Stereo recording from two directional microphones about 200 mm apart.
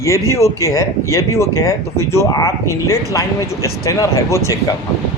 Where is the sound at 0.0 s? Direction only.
15° left (ahead or behind).